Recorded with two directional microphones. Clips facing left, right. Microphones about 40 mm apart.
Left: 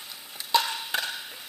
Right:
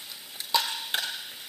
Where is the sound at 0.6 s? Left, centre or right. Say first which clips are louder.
Left 1 dB; left.